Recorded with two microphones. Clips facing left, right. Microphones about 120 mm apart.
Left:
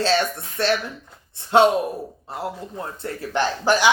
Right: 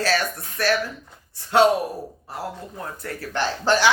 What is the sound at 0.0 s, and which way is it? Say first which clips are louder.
A woman's voice: left 3 dB; 25° left (ahead or behind).